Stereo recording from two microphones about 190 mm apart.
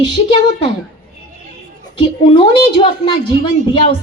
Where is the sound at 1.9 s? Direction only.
25° left (ahead or behind).